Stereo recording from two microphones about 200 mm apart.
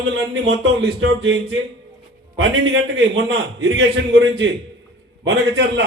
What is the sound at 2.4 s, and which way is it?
A man's voice, 65° right (ahead or behind).